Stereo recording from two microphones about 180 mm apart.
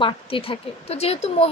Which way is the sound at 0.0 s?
30° left (ahead or behind).